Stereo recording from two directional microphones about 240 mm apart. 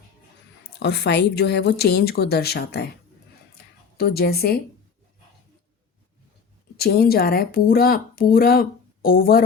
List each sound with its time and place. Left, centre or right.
0.8 s speech: left
3.9 s speech: left
6.7 s speech: left